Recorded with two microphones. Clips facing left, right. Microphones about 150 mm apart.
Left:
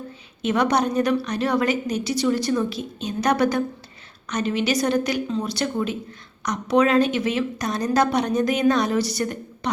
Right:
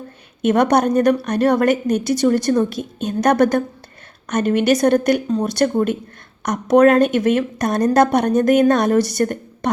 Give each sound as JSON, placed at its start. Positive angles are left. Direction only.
{"t": 0.4, "sound": "a woman's voice", "side_deg": -50}